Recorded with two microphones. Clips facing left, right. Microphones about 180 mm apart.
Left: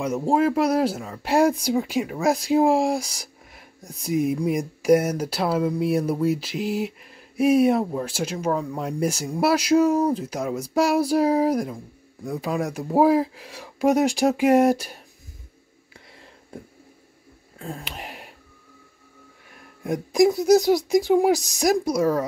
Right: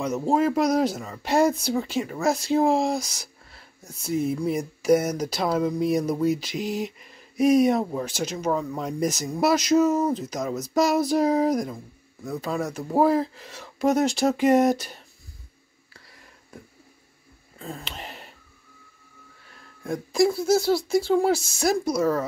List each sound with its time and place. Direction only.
0.0 s speech: 10° left (ahead or behind)
17.6 s speech: centre (ahead or behind)
17.8 s a sound: 10° left (ahead or behind)
19.5 s speech: 20° left (ahead or behind)